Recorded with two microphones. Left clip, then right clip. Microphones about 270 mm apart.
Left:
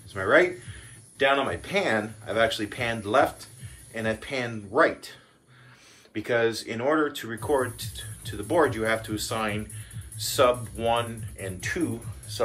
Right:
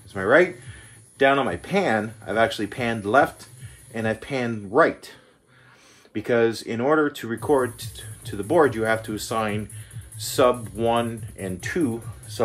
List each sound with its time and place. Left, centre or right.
0.1 s speech: right
6.1 s speech: right